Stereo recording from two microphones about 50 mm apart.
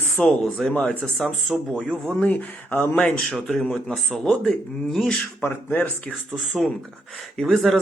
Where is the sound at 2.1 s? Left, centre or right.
Left.